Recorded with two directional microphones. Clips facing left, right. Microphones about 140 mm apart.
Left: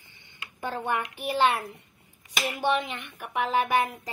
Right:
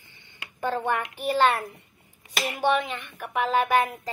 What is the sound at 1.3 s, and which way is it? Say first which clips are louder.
Speech: right 2 dB; 15° left (ahead or behind).